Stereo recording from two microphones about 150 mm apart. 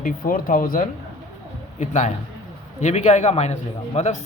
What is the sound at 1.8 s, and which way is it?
A man's voice, 50° left (ahead or behind).